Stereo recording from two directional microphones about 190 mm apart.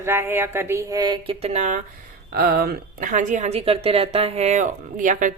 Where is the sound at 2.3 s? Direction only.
55° right (ahead or behind).